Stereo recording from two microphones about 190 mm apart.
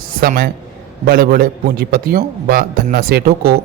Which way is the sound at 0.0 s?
50° right (ahead or behind).